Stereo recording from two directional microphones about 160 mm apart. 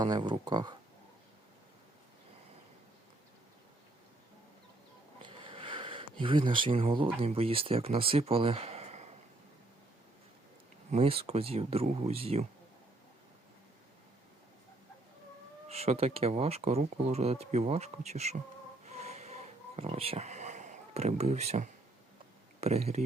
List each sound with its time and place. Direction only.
0.0 s speech: 25° right (ahead or behind)
5.2 s speech: 35° right (ahead or behind)
10.9 s speech: 40° right (ahead or behind)
15.7 s speech: 40° right (ahead or behind)
18.9 s a sound: 45° right (ahead or behind)
22.6 s speech: 40° right (ahead or behind)